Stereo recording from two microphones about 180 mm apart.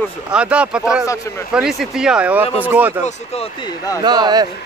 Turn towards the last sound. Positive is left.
turn(degrees=-20)  # may be behind; listen again after turning